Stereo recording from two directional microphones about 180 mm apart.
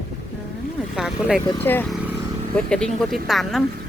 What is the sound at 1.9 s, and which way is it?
Vehicle, 5° right (ahead or behind).